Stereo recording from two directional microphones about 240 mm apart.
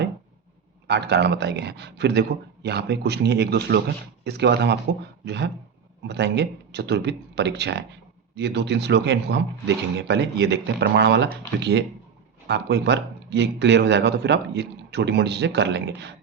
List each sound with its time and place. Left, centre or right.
0.9 s speech: right